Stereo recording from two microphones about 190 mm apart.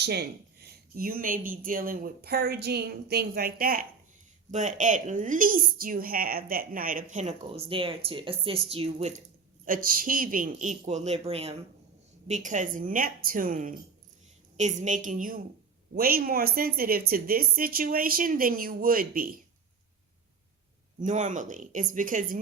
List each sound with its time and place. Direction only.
0.0 s speech: 55° right (ahead or behind); by 9.2 s 35° right (ahead or behind)
9.6 s speech: 45° right (ahead or behind)
21.0 s speech: 40° right (ahead or behind)